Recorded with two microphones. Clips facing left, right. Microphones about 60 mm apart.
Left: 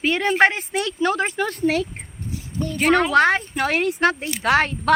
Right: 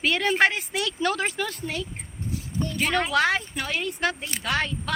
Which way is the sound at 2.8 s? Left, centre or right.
Left.